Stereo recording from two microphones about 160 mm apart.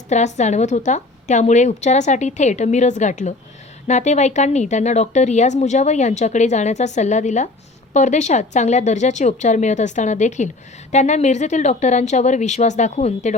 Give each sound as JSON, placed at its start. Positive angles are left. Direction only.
{"t": 0.1, "sound": "a woman's voice", "side_deg": 45}